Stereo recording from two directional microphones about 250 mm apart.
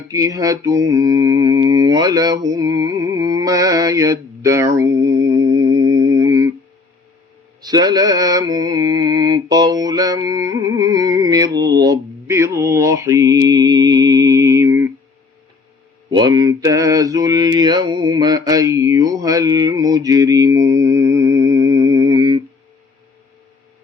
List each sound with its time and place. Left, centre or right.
0.1 s mantra: centre
7.6 s mantra: centre
16.0 s mantra: centre